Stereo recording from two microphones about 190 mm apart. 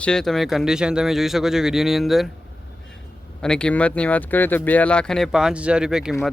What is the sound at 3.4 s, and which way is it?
Speech, 5° left (ahead or behind).